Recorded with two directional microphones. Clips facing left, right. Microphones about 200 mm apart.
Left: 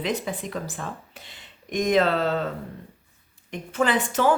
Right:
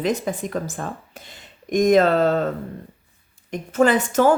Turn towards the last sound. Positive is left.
turn(degrees=-45)  # may be behind; listen again after turning